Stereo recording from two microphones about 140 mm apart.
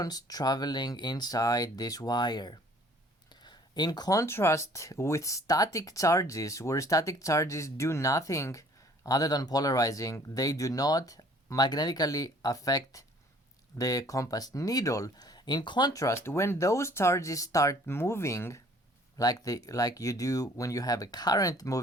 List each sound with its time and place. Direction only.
0.0 s speech: 25° left (ahead or behind)